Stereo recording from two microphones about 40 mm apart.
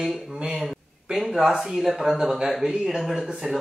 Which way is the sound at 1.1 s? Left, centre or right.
Centre.